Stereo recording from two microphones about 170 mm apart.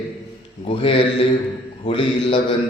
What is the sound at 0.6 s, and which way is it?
A man's voice, 30° left (ahead or behind).